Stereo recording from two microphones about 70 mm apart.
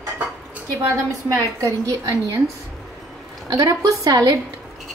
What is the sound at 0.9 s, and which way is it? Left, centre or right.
A woman's voice, right.